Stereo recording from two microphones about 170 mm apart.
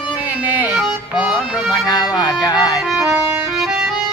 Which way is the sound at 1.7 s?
25° left (ahead or behind).